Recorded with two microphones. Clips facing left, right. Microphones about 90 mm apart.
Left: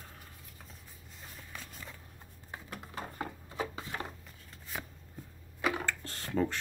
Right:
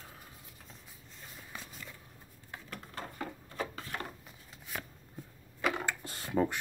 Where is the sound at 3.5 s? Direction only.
15° left (ahead or behind).